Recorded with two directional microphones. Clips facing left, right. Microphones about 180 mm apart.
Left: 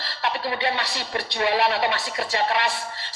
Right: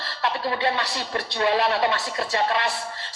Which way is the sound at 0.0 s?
20° left (ahead or behind).